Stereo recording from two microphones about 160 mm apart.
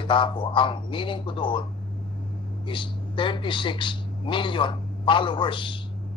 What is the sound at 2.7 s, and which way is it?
A man's voice, 30° left (ahead or behind).